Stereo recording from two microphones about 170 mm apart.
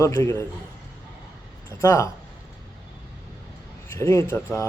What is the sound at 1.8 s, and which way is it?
Speech, 15° left (ahead or behind).